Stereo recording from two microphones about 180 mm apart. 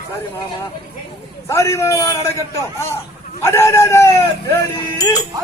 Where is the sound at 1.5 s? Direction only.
15° left (ahead or behind).